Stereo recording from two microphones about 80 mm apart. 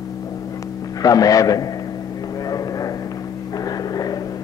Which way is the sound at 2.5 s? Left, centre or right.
Left.